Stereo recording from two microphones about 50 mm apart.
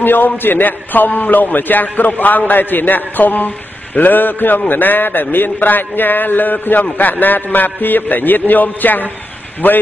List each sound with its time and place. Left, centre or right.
0.0 s a man's voice: left